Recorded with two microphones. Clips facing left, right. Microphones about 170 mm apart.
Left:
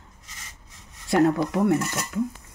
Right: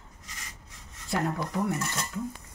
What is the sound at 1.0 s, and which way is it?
Speech, 75° left (ahead or behind).